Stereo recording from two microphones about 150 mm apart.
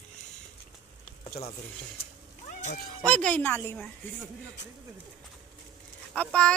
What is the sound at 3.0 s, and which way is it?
Speech, 10° left (ahead or behind).